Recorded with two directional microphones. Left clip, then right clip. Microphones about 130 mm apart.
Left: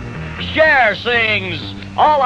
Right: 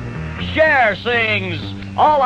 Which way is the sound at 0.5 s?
35° left (ahead or behind).